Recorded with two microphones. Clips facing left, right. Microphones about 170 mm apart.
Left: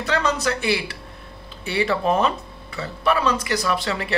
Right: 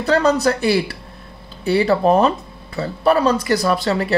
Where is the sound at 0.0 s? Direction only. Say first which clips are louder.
Right 7 dB; 40° right (ahead or behind).